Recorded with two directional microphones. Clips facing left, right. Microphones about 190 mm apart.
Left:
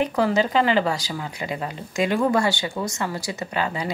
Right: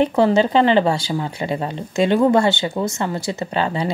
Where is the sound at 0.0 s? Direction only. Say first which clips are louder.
Right 5 dB; 25° right (ahead or behind).